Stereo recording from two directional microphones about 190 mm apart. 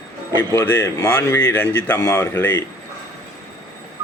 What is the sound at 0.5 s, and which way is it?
Speech, 15° left (ahead or behind).